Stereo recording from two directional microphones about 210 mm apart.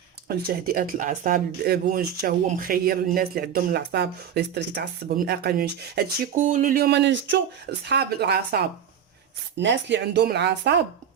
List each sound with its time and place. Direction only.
0.3 s speech: 45° right (ahead or behind)
6.4 s speech: 35° right (ahead or behind)